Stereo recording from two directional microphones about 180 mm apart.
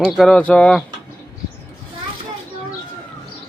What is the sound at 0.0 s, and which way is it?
Speech, 5° left (ahead or behind).